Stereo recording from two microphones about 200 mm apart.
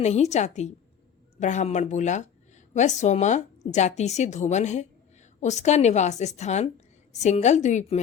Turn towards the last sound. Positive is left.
turn(degrees=35)  # may be behind; listen again after turning